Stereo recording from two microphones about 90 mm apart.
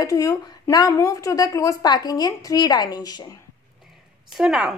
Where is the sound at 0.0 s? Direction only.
40° left (ahead or behind).